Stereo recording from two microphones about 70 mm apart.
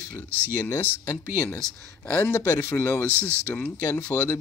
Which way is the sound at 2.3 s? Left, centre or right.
Left.